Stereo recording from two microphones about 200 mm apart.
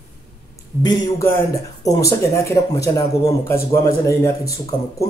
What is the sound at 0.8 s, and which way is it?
Speech, 20° left (ahead or behind).